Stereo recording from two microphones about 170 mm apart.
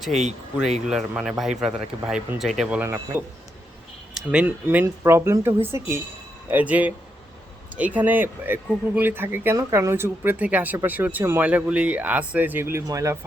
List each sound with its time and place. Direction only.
0.1 s speech: 40° right (ahead or behind)
0.9 s speech: centre (ahead or behind)
4.3 s speech: 10° right (ahead or behind)